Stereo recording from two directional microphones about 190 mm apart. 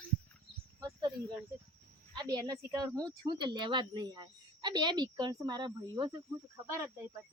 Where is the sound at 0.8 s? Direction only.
20° right (ahead or behind).